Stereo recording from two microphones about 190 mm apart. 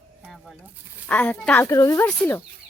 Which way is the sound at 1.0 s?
10° left (ahead or behind).